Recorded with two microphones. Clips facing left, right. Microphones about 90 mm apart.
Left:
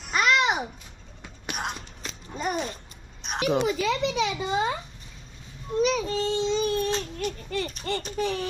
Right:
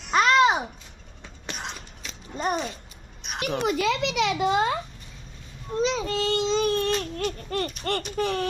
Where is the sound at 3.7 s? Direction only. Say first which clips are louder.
Right 1 dB; 80° right.